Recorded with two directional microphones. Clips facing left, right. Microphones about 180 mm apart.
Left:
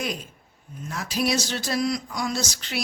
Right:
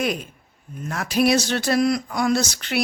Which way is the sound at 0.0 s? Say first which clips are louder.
Right 6 dB; 60° right (ahead or behind).